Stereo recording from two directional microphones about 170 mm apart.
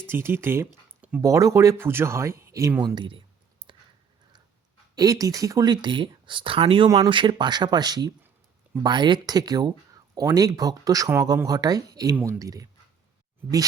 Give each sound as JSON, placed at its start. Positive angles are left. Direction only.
{"t": 0.1, "sound": "speech", "side_deg": -15}
{"t": 0.7, "sound": "a sound", "side_deg": -5}
{"t": 1.2, "sound": "speech", "side_deg": -20}
{"t": 3.6, "sound": "clicking", "side_deg": -30}
{"t": 4.9, "sound": "speech", "side_deg": -20}